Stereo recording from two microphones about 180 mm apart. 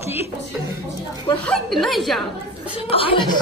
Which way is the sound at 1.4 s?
5° left (ahead or behind).